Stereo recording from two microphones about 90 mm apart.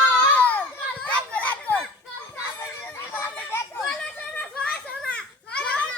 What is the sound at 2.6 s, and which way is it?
Children playing, 30° left (ahead or behind).